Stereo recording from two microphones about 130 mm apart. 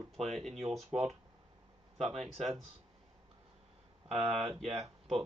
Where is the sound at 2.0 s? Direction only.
Centre (ahead or behind).